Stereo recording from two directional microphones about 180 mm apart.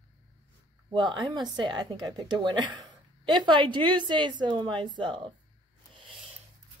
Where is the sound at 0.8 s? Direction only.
25° right (ahead or behind).